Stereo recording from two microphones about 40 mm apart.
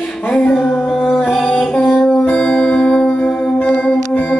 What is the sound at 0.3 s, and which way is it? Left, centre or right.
Music, left.